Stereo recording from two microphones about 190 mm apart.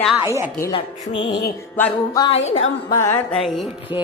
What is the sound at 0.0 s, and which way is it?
Speech, centre (ahead or behind).